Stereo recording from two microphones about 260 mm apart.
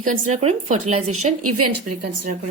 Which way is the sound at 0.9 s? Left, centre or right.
Right.